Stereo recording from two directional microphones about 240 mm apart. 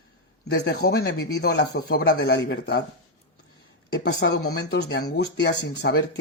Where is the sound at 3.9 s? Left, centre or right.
Left.